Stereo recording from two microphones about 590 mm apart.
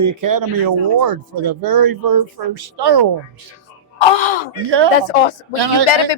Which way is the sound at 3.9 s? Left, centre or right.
Left.